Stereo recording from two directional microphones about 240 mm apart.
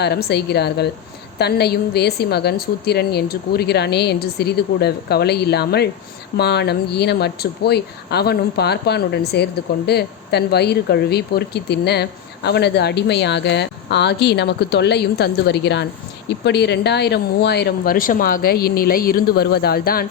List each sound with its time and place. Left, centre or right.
0.0 s speech: left